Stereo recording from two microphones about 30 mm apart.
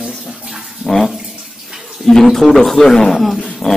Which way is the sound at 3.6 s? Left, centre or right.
Left.